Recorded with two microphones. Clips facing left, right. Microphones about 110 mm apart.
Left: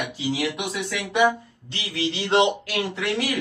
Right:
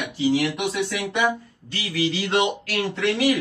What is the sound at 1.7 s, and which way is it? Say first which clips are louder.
Speech: right 3 dB; 25° left (ahead or behind).